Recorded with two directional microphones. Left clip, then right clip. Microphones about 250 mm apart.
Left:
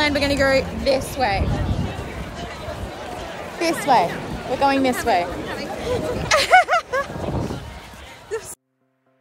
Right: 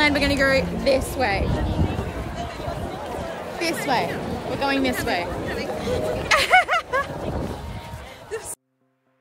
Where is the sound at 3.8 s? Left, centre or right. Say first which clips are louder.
Left 8 dB; centre.